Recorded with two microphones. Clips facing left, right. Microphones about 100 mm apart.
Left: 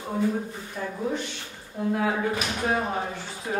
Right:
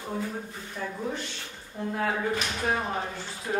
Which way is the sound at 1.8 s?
5° left (ahead or behind).